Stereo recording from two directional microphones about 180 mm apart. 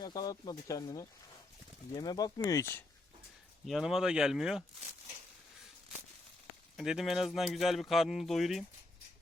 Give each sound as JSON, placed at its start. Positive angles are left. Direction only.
{"t": 0.0, "sound": "speech", "side_deg": 20}
{"t": 3.7, "sound": "speech", "side_deg": 0}
{"t": 6.7, "sound": "speech", "side_deg": 0}